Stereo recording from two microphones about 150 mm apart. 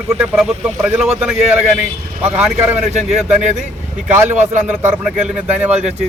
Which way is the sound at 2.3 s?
10° right (ahead or behind).